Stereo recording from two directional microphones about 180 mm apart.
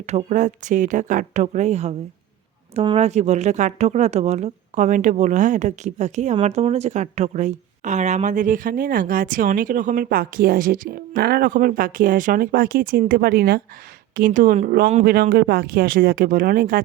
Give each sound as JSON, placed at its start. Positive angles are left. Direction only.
{"t": 0.0, "sound": "speech", "side_deg": -40}